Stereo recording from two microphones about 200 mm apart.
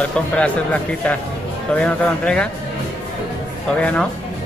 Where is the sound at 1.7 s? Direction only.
5° left (ahead or behind).